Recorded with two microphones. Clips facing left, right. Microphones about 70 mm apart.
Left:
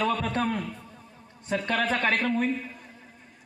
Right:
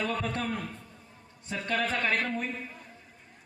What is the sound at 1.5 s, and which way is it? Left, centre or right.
A man's voice, left.